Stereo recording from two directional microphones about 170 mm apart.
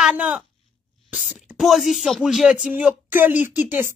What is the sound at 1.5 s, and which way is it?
Speech, centre (ahead or behind).